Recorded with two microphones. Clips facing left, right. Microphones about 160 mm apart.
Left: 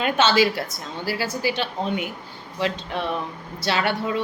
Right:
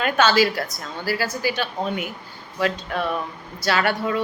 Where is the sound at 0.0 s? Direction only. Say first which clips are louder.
Right 1 dB; 25° left (ahead or behind).